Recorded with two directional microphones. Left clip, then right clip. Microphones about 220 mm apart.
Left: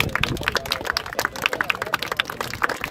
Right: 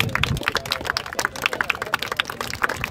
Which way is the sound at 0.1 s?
40° right (ahead or behind).